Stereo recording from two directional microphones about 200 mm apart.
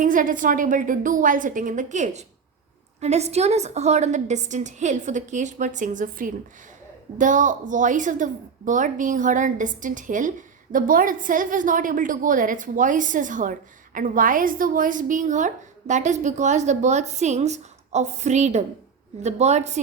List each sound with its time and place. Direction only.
0.0 s a woman's voice: 40° right (ahead or behind)